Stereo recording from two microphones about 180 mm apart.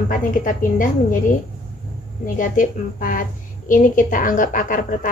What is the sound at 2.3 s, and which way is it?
A woman's voice, 50° left (ahead or behind).